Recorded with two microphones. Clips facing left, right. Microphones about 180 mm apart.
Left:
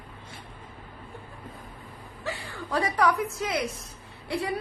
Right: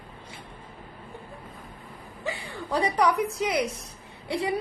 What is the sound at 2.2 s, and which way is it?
Speech, 15° right (ahead or behind).